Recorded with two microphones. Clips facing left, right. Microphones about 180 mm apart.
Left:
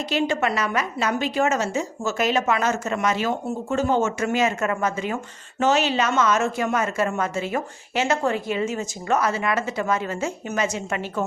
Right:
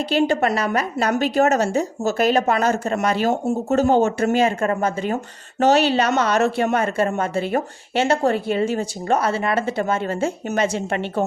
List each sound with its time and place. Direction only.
0.1 s speech: 35° right (ahead or behind)